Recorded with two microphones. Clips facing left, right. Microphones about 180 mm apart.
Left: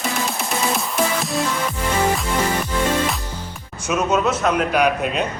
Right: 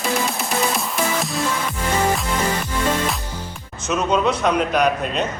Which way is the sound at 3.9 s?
5° left (ahead or behind).